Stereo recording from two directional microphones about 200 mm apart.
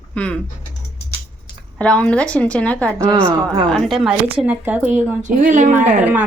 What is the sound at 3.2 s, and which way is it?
Speech, 20° right (ahead or behind).